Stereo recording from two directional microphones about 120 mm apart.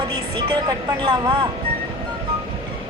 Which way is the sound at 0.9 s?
35° right (ahead or behind).